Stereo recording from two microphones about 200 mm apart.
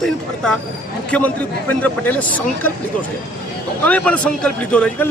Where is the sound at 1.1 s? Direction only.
5° left (ahead or behind).